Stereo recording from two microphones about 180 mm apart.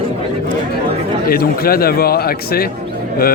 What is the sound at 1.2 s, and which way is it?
A man's voice, 55° left (ahead or behind).